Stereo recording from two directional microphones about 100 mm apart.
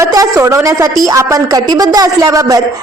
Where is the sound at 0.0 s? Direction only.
35° right (ahead or behind).